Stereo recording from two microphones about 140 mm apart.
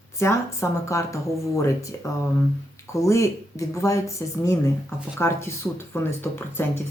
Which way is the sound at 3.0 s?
20° left (ahead or behind).